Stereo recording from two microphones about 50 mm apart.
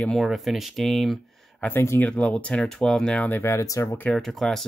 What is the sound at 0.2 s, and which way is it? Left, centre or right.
Speech, centre.